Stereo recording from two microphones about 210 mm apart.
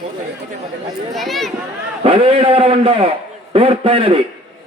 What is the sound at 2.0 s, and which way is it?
A man's voice, 25° right (ahead or behind).